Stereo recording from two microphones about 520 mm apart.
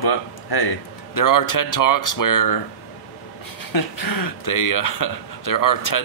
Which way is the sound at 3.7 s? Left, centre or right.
Left.